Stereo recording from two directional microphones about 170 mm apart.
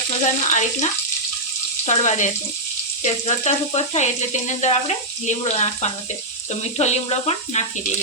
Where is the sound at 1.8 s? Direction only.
45° left (ahead or behind).